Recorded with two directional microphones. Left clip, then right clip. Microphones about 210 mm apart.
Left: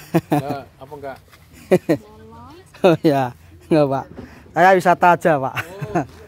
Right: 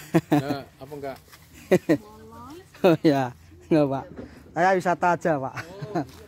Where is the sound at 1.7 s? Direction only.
5° left (ahead or behind).